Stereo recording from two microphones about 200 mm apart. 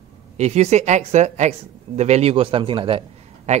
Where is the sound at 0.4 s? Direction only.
35° right (ahead or behind).